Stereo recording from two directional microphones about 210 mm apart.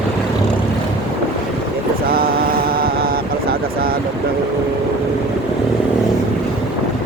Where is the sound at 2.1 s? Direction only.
45° right (ahead or behind).